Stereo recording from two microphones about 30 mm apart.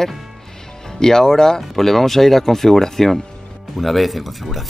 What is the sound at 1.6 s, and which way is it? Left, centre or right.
Speech, centre.